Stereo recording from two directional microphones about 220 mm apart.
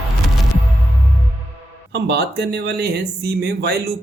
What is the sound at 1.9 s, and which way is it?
Speech, 50° right (ahead or behind).